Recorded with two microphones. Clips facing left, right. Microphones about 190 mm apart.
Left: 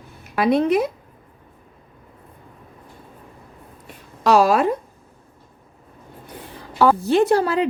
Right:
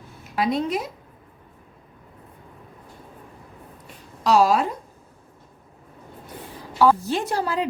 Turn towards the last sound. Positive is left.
turn(degrees=65)  # may be behind; listen again after turning